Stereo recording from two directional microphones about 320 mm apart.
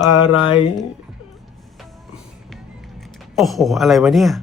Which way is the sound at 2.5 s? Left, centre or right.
Centre.